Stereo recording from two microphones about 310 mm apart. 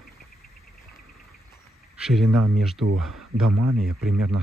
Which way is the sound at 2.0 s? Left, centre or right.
Centre.